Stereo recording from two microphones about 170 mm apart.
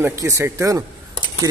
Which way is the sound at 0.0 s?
15° right (ahead or behind).